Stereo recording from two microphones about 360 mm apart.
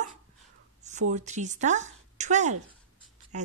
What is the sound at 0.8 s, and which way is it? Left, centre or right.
A woman's voice, centre.